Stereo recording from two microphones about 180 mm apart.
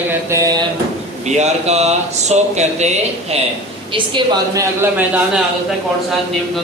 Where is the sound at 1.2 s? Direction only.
40° right (ahead or behind).